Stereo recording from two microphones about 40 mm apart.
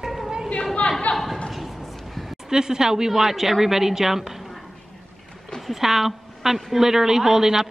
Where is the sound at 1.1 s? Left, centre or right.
Left.